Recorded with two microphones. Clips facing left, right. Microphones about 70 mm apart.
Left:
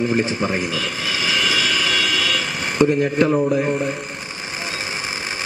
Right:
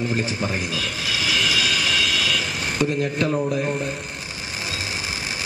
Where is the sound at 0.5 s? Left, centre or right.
Left.